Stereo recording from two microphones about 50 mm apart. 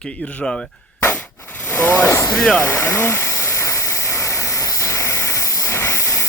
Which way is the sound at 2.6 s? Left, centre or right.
Left.